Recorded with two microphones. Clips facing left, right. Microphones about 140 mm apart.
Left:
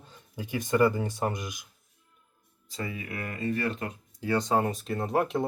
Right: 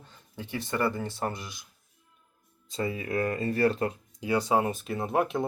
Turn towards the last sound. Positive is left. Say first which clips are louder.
# even
turn(degrees=0)  # may be behind; listen again after turning